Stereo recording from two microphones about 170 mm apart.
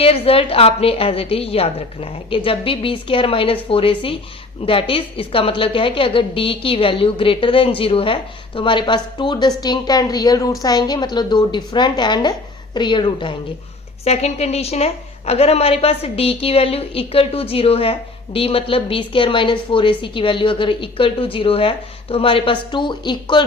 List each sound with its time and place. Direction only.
0.0 s a woman's voice: 35° left (ahead or behind)
14.0 s a woman's voice: 40° left (ahead or behind)